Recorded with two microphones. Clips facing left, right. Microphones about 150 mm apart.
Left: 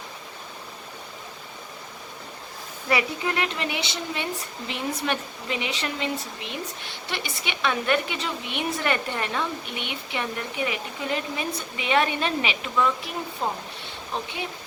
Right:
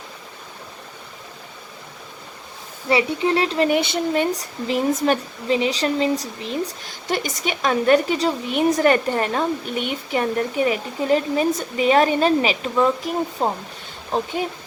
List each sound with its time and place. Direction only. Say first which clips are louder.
2.9 s speech: right 6 dB; 30° right (ahead or behind); by 14.4 s 45° right (ahead or behind)